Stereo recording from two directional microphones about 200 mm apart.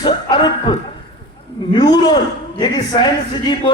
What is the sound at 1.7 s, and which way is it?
A man's voice, 20° left (ahead or behind).